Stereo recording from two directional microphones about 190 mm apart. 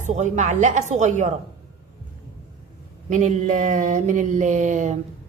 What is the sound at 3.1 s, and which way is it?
A woman's voice, 40° right (ahead or behind).